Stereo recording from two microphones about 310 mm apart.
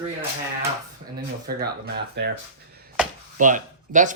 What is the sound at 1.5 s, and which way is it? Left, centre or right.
Speech, right.